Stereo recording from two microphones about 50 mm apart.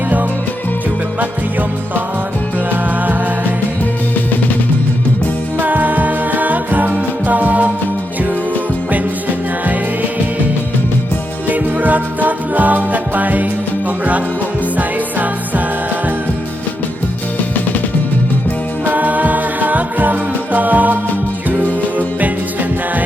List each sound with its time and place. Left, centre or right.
5.5 s music: right
11.4 s music: right
14.8 s music: right
18.9 s music: right